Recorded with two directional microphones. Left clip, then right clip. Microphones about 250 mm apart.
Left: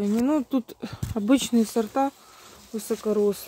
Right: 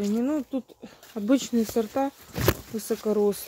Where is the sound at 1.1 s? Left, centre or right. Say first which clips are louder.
Left 2 dB; centre.